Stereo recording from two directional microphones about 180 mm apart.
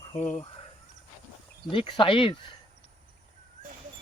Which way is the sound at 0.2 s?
5° left (ahead or behind).